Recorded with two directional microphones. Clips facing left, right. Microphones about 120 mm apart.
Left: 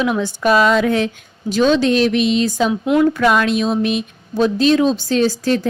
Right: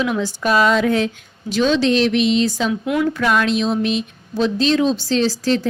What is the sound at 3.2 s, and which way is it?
Speech, 55° left (ahead or behind).